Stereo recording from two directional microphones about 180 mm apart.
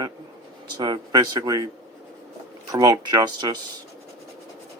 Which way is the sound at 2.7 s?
20° right (ahead or behind).